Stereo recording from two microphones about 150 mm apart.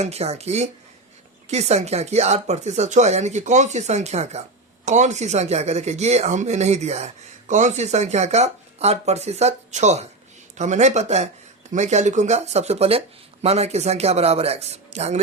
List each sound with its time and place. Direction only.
0.0 s speech: 45° right (ahead or behind)